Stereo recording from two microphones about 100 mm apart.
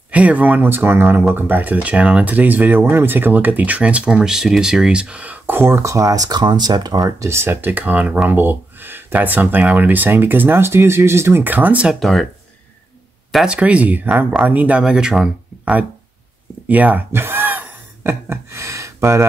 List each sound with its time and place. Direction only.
0.1 s speech: 15° right (ahead or behind); by 7.2 s 40° right (ahead or behind)
7.2 s speech: 25° right (ahead or behind)
12.0 s speech: centre (ahead or behind)
13.3 s speech: centre (ahead or behind)
13.6 s speech: 15° right (ahead or behind)
16.6 s gasp: 15° right (ahead or behind)